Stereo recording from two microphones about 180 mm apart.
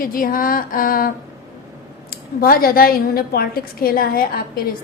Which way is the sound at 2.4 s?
55° left (ahead or behind).